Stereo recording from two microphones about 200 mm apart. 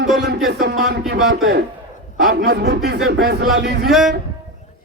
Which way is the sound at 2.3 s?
55° right (ahead or behind).